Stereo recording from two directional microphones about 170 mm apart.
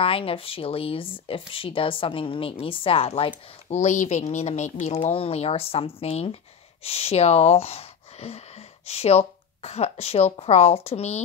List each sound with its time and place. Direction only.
0.0 s speech: 35° left (ahead or behind)
3.7 s speech: 45° left (ahead or behind)